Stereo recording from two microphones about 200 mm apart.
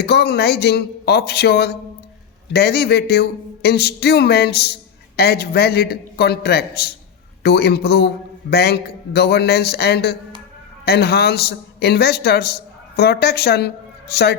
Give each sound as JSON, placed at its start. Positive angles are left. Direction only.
{"t": 0.0, "sound": "a man's voice", "side_deg": 55}